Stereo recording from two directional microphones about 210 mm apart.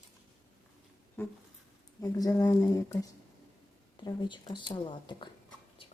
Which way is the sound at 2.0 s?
15° left (ahead or behind).